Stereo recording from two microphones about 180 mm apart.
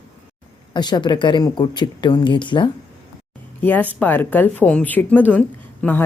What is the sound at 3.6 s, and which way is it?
A woman's voice, 10° left (ahead or behind).